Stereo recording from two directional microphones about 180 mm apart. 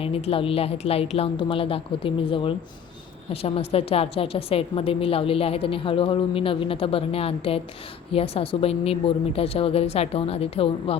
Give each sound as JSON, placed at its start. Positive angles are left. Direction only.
{"t": 0.0, "sound": "a woman's voice", "side_deg": 30}